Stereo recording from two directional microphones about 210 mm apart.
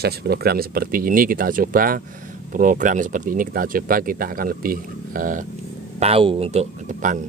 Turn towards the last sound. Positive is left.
turn(degrees=-35)  # may be behind; listen again after turning